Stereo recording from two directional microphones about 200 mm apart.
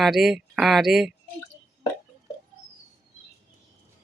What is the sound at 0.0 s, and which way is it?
Speech, centre (ahead or behind).